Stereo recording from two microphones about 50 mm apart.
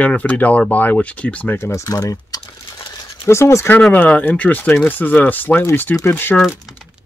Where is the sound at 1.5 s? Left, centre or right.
Left.